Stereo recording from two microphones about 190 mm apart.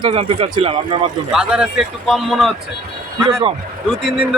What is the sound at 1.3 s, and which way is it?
A man's voice, 5° right (ahead or behind).